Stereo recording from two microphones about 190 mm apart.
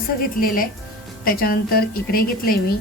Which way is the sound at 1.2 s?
50° left (ahead or behind).